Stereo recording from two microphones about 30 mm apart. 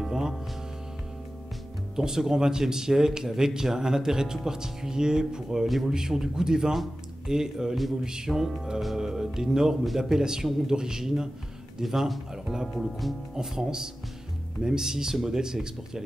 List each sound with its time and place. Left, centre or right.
0.1 s music: centre
2.0 s speech: centre
8.3 s speech: centre
11.8 s speech: centre
12.5 s speech: centre
13.0 s speech: centre
13.4 s speech: centre